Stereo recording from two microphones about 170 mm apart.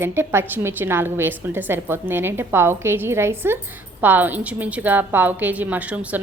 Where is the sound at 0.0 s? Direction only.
15° right (ahead or behind).